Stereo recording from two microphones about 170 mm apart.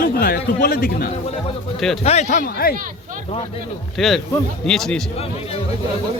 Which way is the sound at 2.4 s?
65° left (ahead or behind).